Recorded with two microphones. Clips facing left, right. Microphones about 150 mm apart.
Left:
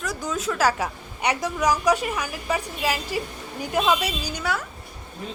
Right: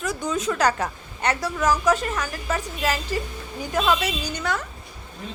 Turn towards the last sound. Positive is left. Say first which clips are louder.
# right 1 dB
turn(degrees=10)  # may be behind; listen again after turning